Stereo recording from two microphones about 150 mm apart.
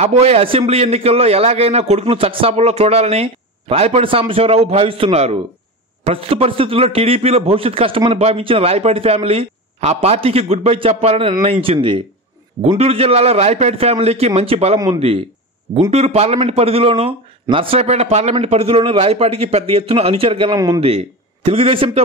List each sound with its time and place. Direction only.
0.0 s a man's voice: 45° right (ahead or behind)
15.9 s a man's voice: 45° right (ahead or behind)
20.5 s a man's voice: 25° right (ahead or behind)
20.8 s speech: 40° right (ahead or behind)